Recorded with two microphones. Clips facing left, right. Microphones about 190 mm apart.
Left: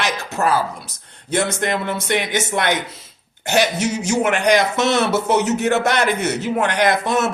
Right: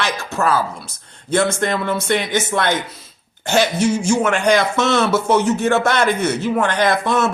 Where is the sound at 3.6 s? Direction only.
20° left (ahead or behind).